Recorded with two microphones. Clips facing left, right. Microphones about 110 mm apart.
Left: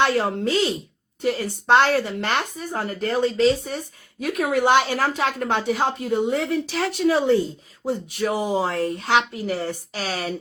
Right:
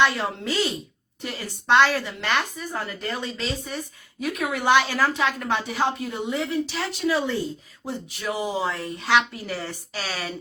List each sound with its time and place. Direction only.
0.0 s a woman's voice: 50° left (ahead or behind)